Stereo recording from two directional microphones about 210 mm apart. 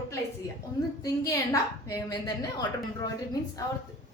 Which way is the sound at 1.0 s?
15° left (ahead or behind).